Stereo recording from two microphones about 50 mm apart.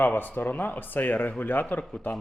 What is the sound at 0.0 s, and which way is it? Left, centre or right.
Speech, left.